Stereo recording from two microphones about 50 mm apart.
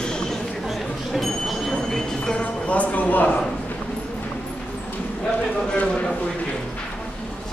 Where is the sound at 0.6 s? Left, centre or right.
Centre.